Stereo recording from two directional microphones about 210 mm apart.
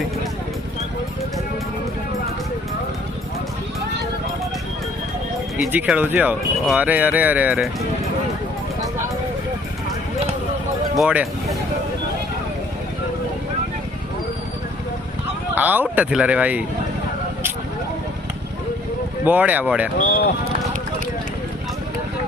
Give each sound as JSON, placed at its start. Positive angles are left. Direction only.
{"t": 5.7, "sound": "speech", "side_deg": -10}
{"t": 10.9, "sound": "speech", "side_deg": -5}
{"t": 15.5, "sound": "speech", "side_deg": -10}
{"t": 19.2, "sound": "speech", "side_deg": -10}
{"t": 20.0, "sound": "speech", "side_deg": 45}